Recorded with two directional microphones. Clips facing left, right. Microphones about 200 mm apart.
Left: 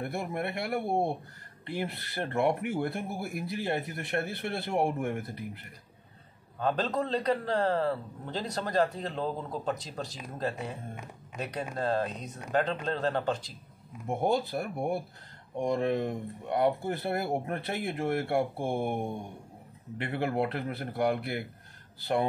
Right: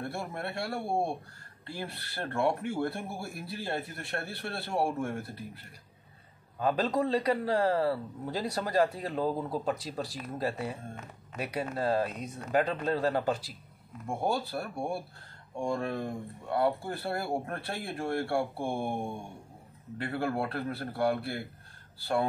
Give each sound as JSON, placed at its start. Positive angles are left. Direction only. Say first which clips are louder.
{"t": 0.0, "sound": "speech", "louder": "left 3 dB", "side_deg": 15}
{"t": 6.6, "sound": "a man's voice", "louder": "right 1 dB", "side_deg": -10}
{"t": 14.0, "sound": "speech", "louder": "left 3 dB", "side_deg": 20}